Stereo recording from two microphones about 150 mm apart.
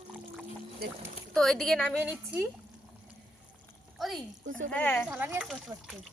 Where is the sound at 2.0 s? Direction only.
10° right (ahead or behind).